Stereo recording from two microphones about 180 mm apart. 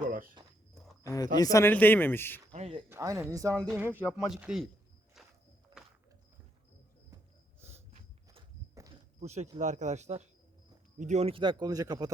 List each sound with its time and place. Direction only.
0.1 s a sound: 50° right (ahead or behind)
1.0 s speech: 20° left (ahead or behind)
2.5 s a sound: 35° right (ahead or behind)
2.9 s speech: 15° right (ahead or behind)
7.9 s walk: 30° right (ahead or behind)
9.2 s speech: 40° right (ahead or behind); by 12.1 s 20° right (ahead or behind)